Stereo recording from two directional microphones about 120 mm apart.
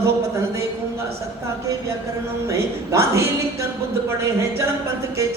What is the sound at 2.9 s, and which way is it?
Speech, 25° right (ahead or behind).